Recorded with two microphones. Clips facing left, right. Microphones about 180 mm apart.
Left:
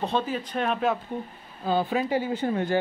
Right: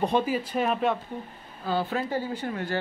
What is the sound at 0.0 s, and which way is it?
Speech, 10° right (ahead or behind).